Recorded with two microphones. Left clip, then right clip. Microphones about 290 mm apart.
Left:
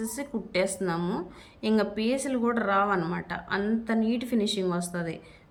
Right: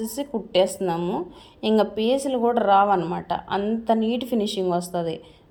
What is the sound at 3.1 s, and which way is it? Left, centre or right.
Speech, right.